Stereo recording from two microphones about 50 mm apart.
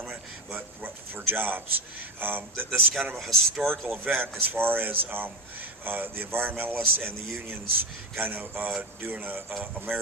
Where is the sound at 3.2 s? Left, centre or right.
Centre.